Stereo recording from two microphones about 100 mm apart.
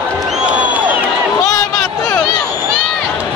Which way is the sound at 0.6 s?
15° right (ahead or behind).